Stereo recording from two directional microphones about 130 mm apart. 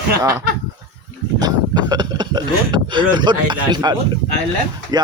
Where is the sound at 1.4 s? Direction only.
30° right (ahead or behind).